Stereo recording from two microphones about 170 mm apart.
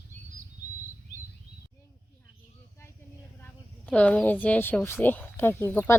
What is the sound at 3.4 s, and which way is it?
A woman's voice, 10° left (ahead or behind).